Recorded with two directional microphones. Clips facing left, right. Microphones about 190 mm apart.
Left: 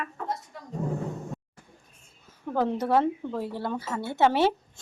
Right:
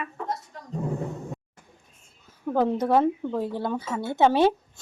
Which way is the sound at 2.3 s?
10° right (ahead or behind).